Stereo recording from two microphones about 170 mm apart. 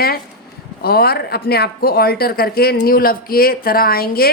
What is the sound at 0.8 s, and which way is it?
Speech, 65° left (ahead or behind).